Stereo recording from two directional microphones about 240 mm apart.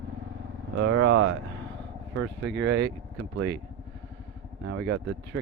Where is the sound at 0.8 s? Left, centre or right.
Right.